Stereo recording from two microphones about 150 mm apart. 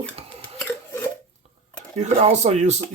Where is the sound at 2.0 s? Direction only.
50° right (ahead or behind).